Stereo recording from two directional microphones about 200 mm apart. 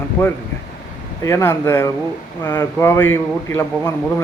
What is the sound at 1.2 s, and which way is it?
A man's voice, 15° left (ahead or behind).